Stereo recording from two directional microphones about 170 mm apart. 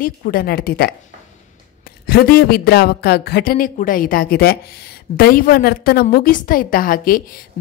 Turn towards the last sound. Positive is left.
turn(degrees=60)  # may be behind; listen again after turning